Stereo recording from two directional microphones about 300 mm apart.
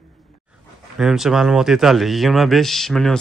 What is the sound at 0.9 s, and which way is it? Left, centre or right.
Speech, centre.